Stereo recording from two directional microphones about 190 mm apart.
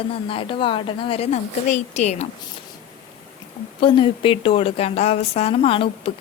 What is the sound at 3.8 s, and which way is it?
A woman's voice, 25° left (ahead or behind).